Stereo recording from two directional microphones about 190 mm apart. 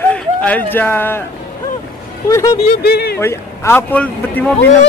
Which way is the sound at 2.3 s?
15° left (ahead or behind).